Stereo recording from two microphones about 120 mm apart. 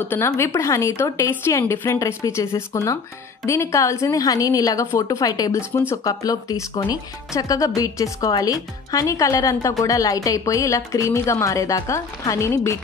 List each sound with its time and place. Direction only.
0.0 s speech: 20° left (ahead or behind)